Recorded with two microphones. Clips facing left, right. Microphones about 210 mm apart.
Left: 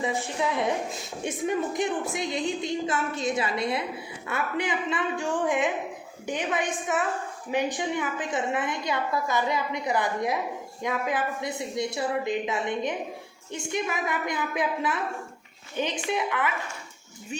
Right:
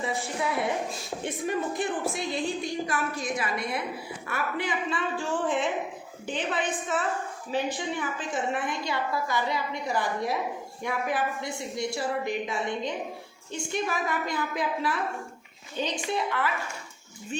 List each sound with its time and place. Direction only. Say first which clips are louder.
1.5 s a woman's voice: left 2 dB; 20° left (ahead or behind)